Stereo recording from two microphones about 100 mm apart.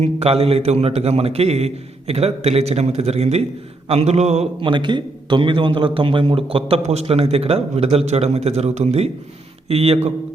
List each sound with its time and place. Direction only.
0.0 s a man's voice: 90° right
4.7 s a man's voice: 50° right (ahead or behind); by 10.1 s 85° right